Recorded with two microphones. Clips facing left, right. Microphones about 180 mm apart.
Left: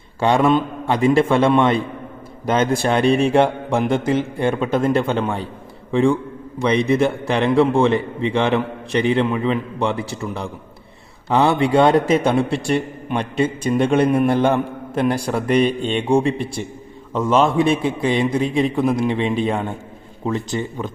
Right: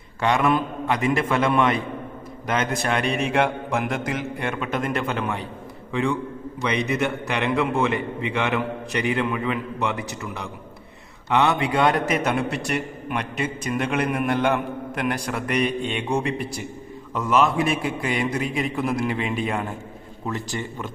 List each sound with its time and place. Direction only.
0.2 s a man's voice: 30° left (ahead or behind)